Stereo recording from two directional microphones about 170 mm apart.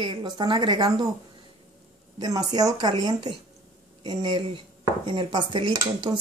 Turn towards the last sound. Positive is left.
turn(degrees=-20)  # may be behind; listen again after turning